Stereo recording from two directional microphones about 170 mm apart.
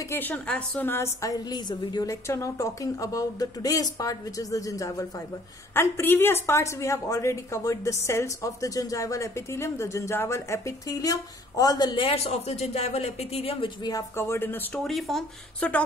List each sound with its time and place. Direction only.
0.1 s a woman's voice: 10° left (ahead or behind); by 13.7 s 35° left (ahead or behind)
13.8 s speech: 20° left (ahead or behind)
14.8 s speech: centre (ahead or behind)